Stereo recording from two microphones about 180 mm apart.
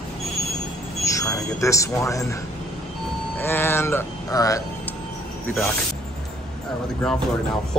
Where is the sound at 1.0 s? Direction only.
20° left (ahead or behind).